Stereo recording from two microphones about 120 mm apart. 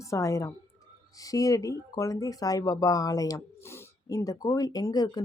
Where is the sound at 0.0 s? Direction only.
25° left (ahead or behind).